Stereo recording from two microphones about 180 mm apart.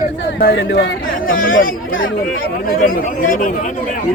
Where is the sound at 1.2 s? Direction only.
50° left (ahead or behind).